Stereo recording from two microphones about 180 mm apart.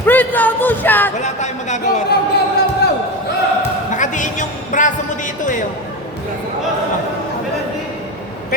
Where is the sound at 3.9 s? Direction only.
45° left (ahead or behind).